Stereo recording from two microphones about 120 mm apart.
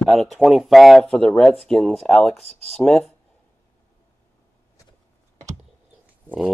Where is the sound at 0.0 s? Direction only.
Centre (ahead or behind).